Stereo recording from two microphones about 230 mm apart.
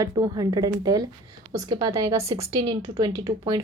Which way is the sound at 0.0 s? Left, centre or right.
Centre.